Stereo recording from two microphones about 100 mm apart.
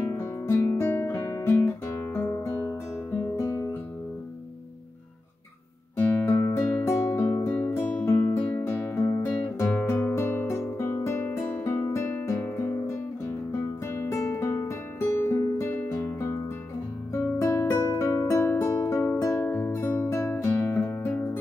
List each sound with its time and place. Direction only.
0.1 s guitar: 25° left (ahead or behind)
2.1 s music: 25° left (ahead or behind)
3.1 s guitar: 30° left (ahead or behind)
5.9 s music: 25° left (ahead or behind)